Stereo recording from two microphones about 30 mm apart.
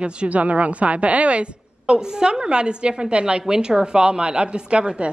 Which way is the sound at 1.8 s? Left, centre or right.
Right.